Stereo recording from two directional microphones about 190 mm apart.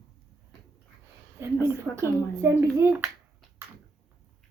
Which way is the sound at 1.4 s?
15° right (ahead or behind).